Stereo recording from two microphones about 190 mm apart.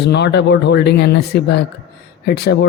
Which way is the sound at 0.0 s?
65° left (ahead or behind).